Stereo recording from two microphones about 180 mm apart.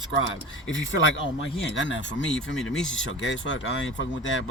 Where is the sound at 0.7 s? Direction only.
90° left.